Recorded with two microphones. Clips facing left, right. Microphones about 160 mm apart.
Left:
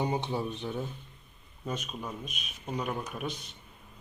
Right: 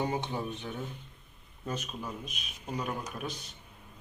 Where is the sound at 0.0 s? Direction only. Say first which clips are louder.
Left 2 dB; 15° left (ahead or behind).